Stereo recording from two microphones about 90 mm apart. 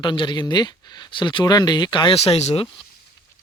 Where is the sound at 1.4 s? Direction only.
45° left (ahead or behind); by 2.7 s 90° left.